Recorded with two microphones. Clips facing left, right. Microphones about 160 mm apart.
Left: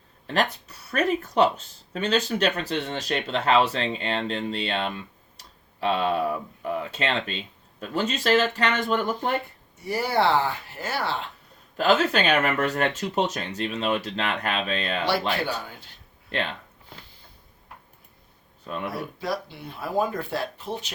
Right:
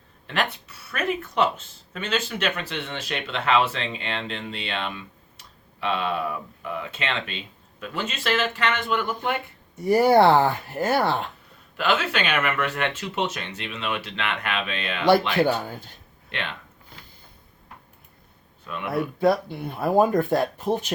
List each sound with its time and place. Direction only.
0.3 s speech: 40° left (ahead or behind)
9.8 s speech: 50° right (ahead or behind)
11.8 s speech: 40° left (ahead or behind)
15.4 s speech: 50° right (ahead or behind)
16.3 s speech: 40° left (ahead or behind)
18.6 s speech: 35° left (ahead or behind)
18.9 s speech: 55° right (ahead or behind)